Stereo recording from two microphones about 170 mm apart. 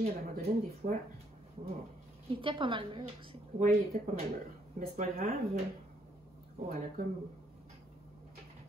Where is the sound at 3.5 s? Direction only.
45° right (ahead or behind).